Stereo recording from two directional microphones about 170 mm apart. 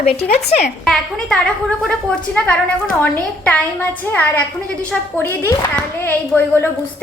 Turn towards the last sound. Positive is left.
turn(degrees=15)  # may be behind; listen again after turning